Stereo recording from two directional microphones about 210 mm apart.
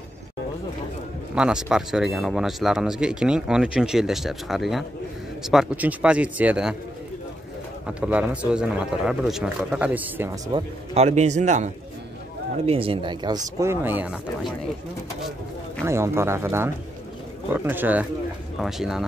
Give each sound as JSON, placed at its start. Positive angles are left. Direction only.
{"t": 1.3, "sound": "speech", "side_deg": -5}
{"t": 7.8, "sound": "speech", "side_deg": -5}
{"t": 10.5, "sound": "speech", "side_deg": -30}
{"t": 15.8, "sound": "speech", "side_deg": -10}